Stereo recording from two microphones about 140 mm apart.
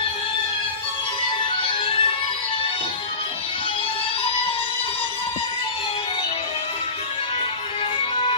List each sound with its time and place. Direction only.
1.6 s music: 40° left (ahead or behind)